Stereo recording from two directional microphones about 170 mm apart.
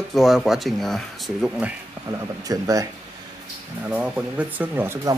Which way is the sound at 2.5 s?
20° right (ahead or behind).